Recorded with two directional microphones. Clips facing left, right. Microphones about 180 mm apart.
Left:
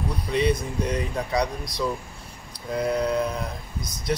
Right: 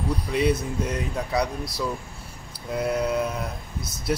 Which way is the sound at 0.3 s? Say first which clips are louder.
Left 1 dB; 5° right (ahead or behind).